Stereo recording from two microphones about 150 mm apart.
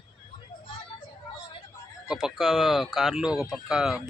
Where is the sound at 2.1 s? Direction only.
5° right (ahead or behind).